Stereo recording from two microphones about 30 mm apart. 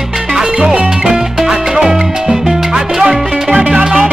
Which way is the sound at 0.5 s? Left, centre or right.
Right.